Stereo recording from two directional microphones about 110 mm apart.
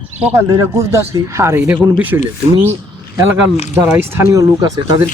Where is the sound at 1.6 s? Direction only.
15° right (ahead or behind).